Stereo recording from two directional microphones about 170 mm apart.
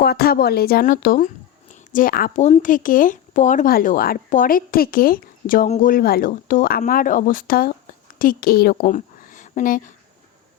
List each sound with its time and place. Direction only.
0.0 s speech: 65° left (ahead or behind)
2.4 s speech: 45° left (ahead or behind)
5.6 s speech: 40° left (ahead or behind)
5.9 s a woman's voice: 65° left (ahead or behind)